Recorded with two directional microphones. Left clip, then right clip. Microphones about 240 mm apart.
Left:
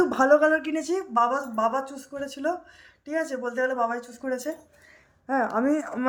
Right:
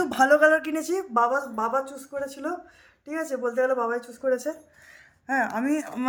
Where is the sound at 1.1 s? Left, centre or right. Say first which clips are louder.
Even; centre.